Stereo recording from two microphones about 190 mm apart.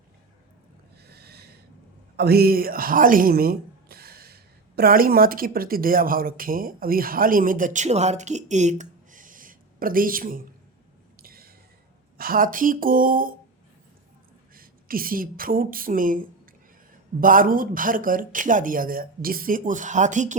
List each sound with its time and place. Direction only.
1.0 s snort: 55° right (ahead or behind)
2.1 s speech: 55° right (ahead or behind)
11.2 s a sound: 50° right (ahead or behind)
12.1 s speech: 50° right (ahead or behind)
14.5 s a woman's voice: 50° right (ahead or behind)